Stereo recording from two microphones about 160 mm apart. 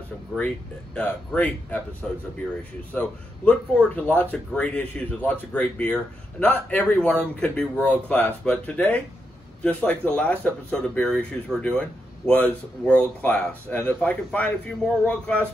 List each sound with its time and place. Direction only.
0.9 s speech: 10° left (ahead or behind)